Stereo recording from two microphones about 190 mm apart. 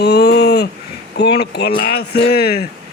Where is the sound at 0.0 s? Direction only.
60° left (ahead or behind).